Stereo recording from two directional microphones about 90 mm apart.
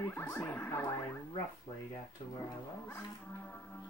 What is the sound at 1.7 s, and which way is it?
Speech, 50° left (ahead or behind).